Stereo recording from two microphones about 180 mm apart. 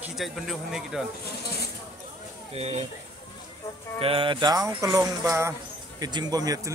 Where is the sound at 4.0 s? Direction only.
30° right (ahead or behind).